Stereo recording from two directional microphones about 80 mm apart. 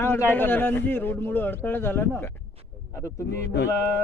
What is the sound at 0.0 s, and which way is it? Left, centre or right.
A man's voice, left.